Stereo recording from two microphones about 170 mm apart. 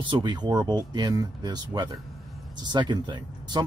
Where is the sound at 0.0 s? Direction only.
25° right (ahead or behind).